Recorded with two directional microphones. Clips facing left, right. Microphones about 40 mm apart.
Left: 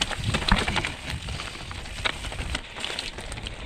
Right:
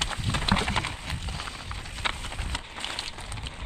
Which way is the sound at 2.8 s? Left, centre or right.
Centre.